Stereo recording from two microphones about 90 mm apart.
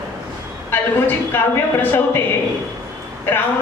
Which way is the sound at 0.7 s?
25° left (ahead or behind).